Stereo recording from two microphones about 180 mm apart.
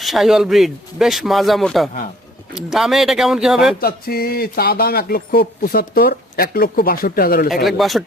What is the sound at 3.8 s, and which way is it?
Speech, 55° left (ahead or behind).